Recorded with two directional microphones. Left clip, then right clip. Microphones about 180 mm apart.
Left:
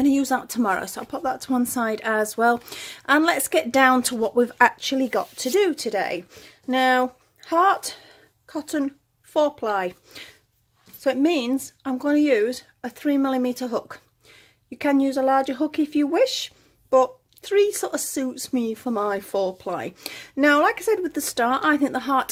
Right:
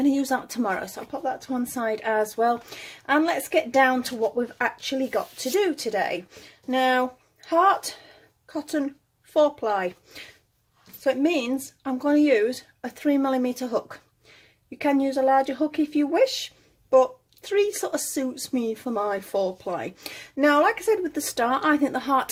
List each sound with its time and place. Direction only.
0.0 s a woman's voice: 25° left (ahead or behind)